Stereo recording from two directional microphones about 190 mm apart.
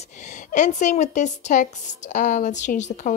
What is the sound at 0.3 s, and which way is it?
A woman's voice, 40° left (ahead or behind).